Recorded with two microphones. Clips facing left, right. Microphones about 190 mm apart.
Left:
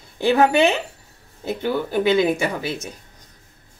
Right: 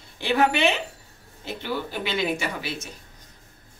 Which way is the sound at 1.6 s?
50° left (ahead or behind).